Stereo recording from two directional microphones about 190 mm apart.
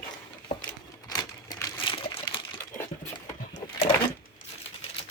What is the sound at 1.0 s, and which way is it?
Typewriter, 20° left (ahead or behind).